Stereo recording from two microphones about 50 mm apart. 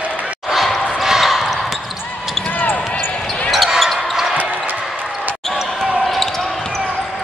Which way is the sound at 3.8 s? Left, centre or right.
Centre.